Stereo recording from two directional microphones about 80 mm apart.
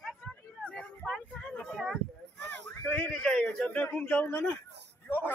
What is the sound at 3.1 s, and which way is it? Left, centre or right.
A man's voice, centre.